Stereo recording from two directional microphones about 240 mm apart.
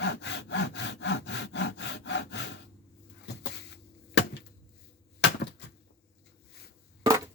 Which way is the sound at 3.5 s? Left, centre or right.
Left.